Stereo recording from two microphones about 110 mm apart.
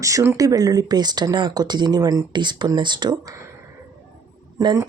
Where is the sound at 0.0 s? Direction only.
25° right (ahead or behind).